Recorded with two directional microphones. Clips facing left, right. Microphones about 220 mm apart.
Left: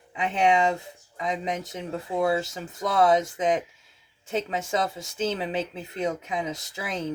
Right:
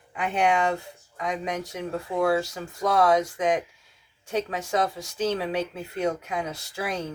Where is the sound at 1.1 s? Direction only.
20° left (ahead or behind).